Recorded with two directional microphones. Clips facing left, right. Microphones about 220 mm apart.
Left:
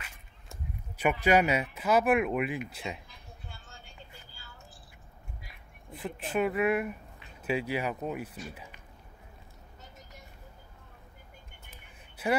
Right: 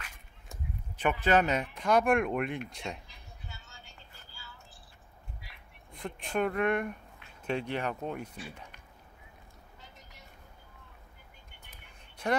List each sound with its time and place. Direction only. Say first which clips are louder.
0.0 s speech: even; 10° left (ahead or behind)
3.4 s vehicle: even; 55° left (ahead or behind)
5.9 s speech: left 2 dB; 5° left (ahead or behind)
12.2 s a sound: left 2 dB; 5° left (ahead or behind)